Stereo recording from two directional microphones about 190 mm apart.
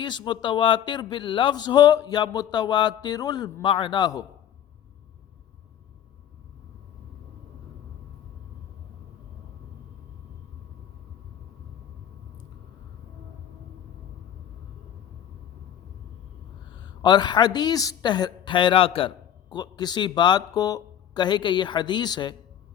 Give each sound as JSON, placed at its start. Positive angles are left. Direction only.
{"t": 0.0, "sound": "a man's voice", "side_deg": 25}
{"t": 16.7, "sound": "speech", "side_deg": 20}